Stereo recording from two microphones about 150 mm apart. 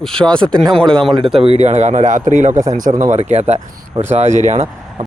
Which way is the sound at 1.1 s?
35° right (ahead or behind).